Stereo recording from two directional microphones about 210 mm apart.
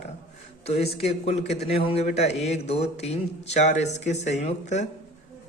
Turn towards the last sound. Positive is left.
turn(degrees=35)  # may be behind; listen again after turning